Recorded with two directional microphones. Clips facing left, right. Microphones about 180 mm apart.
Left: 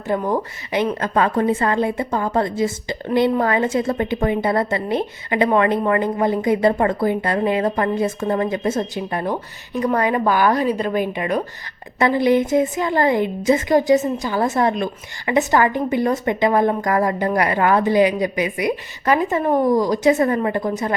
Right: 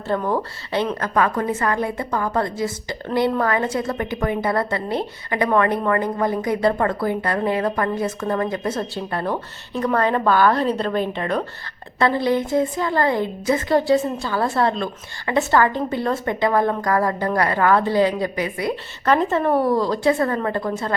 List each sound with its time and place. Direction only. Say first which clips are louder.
0.1 s a woman's voice: left 1 dB; 15° left (ahead or behind)